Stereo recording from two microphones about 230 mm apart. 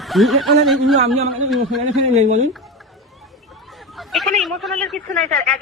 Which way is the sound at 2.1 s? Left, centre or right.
Right.